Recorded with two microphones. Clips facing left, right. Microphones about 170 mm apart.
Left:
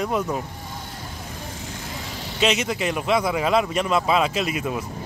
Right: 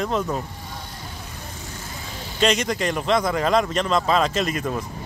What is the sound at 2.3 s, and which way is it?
A man's voice, 5° left (ahead or behind).